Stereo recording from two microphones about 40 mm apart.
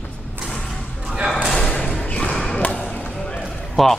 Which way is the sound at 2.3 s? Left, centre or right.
Centre.